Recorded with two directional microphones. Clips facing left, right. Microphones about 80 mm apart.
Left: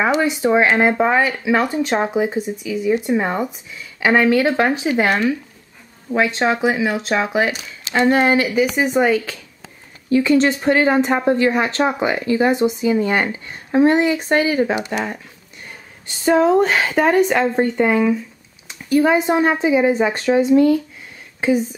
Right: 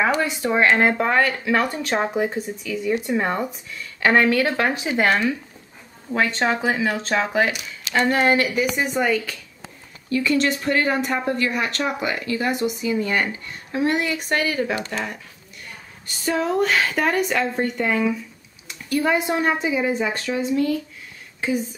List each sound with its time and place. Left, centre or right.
0.0 s a woman's voice: centre
16.3 s a woman's voice: left